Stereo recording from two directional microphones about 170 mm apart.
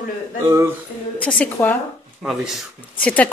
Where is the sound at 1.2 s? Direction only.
10° left (ahead or behind).